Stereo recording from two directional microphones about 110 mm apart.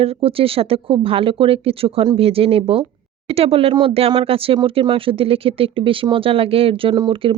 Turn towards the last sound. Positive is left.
turn(degrees=-55)  # may be behind; listen again after turning